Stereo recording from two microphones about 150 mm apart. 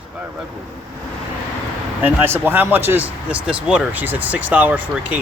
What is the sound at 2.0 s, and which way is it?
Speech, 15° right (ahead or behind).